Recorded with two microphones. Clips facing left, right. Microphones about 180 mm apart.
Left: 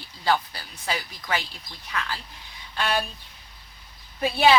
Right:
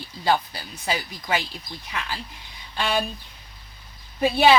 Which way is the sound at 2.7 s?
Centre (ahead or behind).